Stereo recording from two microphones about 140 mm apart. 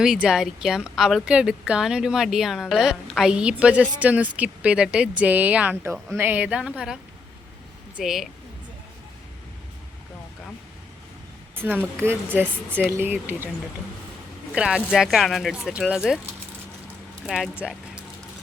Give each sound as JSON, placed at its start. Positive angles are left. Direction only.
{"t": 0.0, "sound": "speech", "side_deg": -5}
{"t": 11.5, "sound": "speech", "side_deg": -15}
{"t": 14.5, "sound": "speech", "side_deg": -5}
{"t": 17.2, "sound": "speech", "side_deg": 0}